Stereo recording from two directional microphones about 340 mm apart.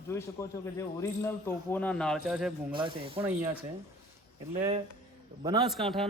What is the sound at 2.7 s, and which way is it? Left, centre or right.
Speech, centre.